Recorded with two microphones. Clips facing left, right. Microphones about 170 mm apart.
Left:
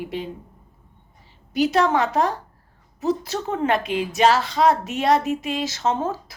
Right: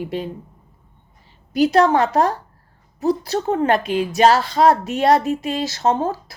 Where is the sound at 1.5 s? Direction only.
35° right (ahead or behind).